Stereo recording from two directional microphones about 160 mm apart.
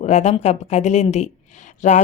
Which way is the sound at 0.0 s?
45° left (ahead or behind).